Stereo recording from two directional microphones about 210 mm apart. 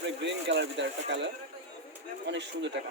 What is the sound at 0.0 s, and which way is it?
Speech, 60° right (ahead or behind).